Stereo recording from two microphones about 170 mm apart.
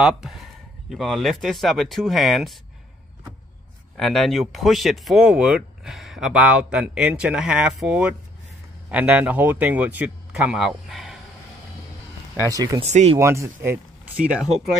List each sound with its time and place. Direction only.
0.0 s a man's voice: centre (ahead or behind)
3.9 s speech: centre (ahead or behind)
12.4 s speech: 20° right (ahead or behind)
12.8 s speech: 40° right (ahead or behind)
13.2 s speech: 15° right (ahead or behind)
14.2 s speech: centre (ahead or behind)